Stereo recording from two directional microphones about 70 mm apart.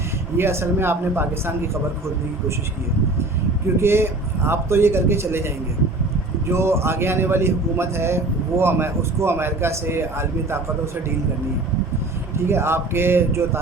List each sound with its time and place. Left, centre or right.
0.3 s a man's voice: right
3.8 s a man's voice: right
6.5 s a man's voice: right
12.5 s a man's voice: right